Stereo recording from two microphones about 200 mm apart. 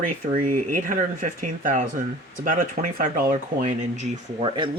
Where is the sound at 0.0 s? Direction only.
40° right (ahead or behind).